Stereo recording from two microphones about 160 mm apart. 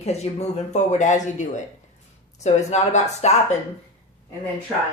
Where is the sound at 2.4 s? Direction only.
45° left (ahead or behind).